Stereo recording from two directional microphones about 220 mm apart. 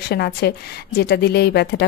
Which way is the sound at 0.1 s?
50° left (ahead or behind).